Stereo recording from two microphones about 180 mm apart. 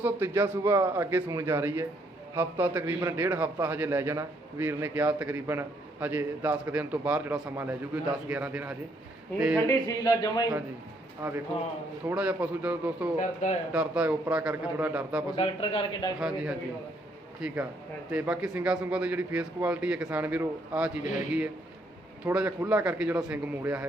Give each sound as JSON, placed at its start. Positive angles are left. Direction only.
{"t": 0.0, "sound": "a man's voice", "side_deg": -10}
{"t": 9.3, "sound": "speech", "side_deg": 10}
{"t": 9.6, "sound": "speech", "side_deg": 20}
{"t": 11.2, "sound": "a man's voice", "side_deg": -15}
{"t": 13.1, "sound": "a man's voice", "side_deg": 40}
{"t": 13.7, "sound": "a man's voice", "side_deg": -10}
{"t": 15.4, "sound": "a man's voice", "side_deg": 30}
{"t": 16.2, "sound": "a man's voice", "side_deg": -5}